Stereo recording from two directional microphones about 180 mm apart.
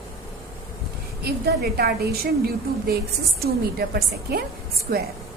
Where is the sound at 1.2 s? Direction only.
60° right (ahead or behind).